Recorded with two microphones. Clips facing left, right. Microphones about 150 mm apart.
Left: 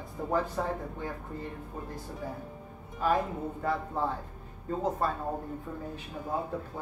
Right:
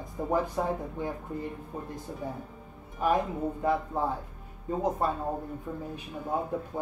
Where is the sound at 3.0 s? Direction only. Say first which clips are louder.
Right 2 dB; 15° right (ahead or behind).